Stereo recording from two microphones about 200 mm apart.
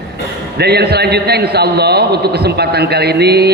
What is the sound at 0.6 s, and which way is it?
A man's voice, 55° right (ahead or behind).